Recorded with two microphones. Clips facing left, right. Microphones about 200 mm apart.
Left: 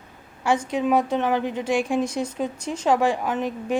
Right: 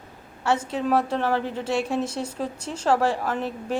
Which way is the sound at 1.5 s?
30° right (ahead or behind).